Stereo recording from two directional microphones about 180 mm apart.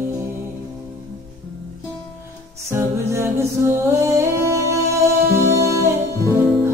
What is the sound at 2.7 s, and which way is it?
Music, 15° right (ahead or behind).